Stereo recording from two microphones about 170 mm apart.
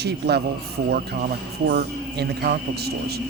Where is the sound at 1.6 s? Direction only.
60° right (ahead or behind).